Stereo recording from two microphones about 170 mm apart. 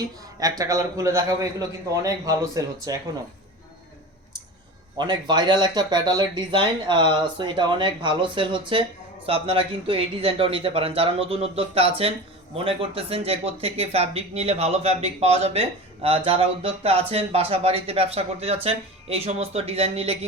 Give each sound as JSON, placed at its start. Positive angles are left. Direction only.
{"t": 0.3, "sound": "speech", "side_deg": -20}
{"t": 4.9, "sound": "speech", "side_deg": -25}